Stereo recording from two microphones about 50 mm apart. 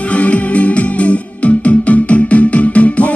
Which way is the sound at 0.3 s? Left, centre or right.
Left.